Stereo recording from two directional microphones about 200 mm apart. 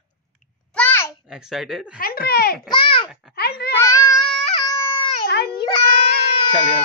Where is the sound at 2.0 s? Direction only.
50° left (ahead or behind).